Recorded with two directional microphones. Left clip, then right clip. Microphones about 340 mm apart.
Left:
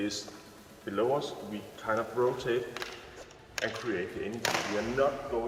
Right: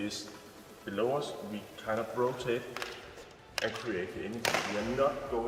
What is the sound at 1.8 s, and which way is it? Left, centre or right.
Speech, centre.